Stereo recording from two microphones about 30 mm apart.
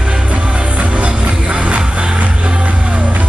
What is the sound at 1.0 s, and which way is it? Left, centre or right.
Music, right.